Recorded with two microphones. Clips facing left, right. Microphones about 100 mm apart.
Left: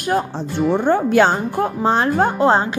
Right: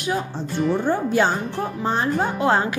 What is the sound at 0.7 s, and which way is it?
Speech, 70° left (ahead or behind).